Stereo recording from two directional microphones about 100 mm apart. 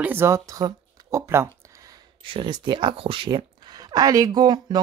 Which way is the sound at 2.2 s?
60° right (ahead or behind).